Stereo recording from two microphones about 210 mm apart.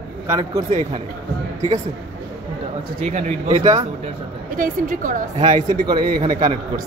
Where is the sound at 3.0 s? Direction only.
35° right (ahead or behind).